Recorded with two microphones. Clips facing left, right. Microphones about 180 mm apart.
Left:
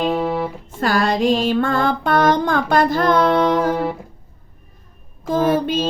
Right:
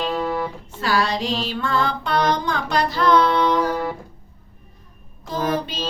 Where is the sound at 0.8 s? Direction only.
50° left (ahead or behind).